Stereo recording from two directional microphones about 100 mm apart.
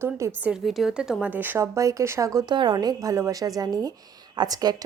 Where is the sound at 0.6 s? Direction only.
Centre (ahead or behind); by 1.6 s 20° right (ahead or behind).